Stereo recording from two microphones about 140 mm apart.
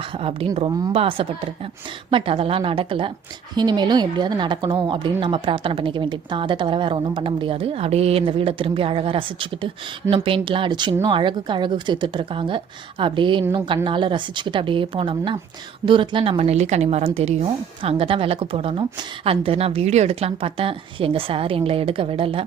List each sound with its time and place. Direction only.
0.2 s a woman's voice: 40° right (ahead or behind)